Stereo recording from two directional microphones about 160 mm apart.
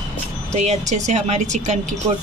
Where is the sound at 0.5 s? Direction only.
45° right (ahead or behind).